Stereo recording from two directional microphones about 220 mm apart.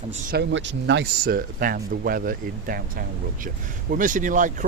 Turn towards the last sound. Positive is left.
turn(degrees=-35)  # may be behind; listen again after turning